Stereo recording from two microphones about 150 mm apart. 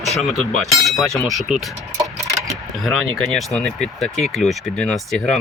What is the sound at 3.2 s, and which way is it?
Speech, 5° left (ahead or behind).